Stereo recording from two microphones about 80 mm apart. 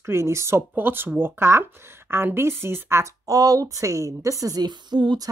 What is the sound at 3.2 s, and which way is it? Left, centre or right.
A woman's voice, right.